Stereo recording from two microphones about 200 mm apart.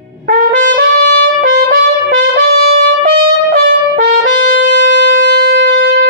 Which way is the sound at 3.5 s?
40° right (ahead or behind).